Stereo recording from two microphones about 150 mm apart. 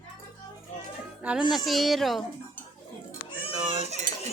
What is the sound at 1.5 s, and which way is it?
Speech, centre (ahead or behind).